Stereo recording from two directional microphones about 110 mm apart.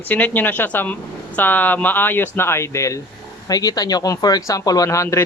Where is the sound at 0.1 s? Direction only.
15° left (ahead or behind).